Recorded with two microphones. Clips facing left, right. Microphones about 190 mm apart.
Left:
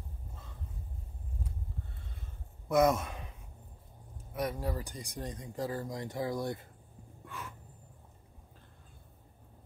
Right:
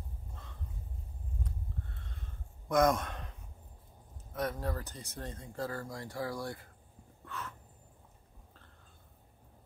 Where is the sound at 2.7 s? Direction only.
5° left (ahead or behind).